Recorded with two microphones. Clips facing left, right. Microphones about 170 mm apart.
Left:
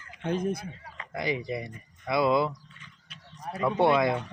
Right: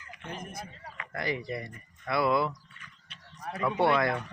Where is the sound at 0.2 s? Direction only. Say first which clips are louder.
Left 13 dB; 75° left (ahead or behind).